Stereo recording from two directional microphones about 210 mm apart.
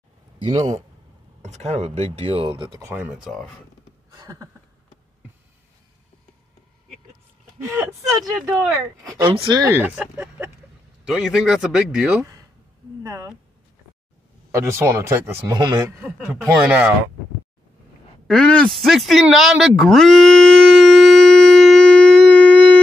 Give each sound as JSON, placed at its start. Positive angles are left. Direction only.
{"t": 0.4, "sound": "a man's voice", "side_deg": -15}
{"t": 1.4, "sound": "speech", "side_deg": -30}
{"t": 2.9, "sound": "speech", "side_deg": -5}
{"t": 4.2, "sound": "a sound", "side_deg": -15}
{"t": 7.7, "sound": "a man's voice", "side_deg": -15}
{"t": 8.4, "sound": "speech", "side_deg": -5}
{"t": 9.1, "sound": "a man's voice", "side_deg": -20}
{"t": 13.0, "sound": "speech", "side_deg": -15}
{"t": 14.5, "sound": "a man's voice", "side_deg": -10}
{"t": 16.0, "sound": "speech", "side_deg": 0}
{"t": 18.2, "sound": "a sound", "side_deg": 5}